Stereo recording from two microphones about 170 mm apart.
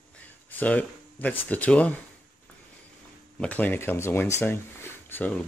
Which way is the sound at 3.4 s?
10° left (ahead or behind).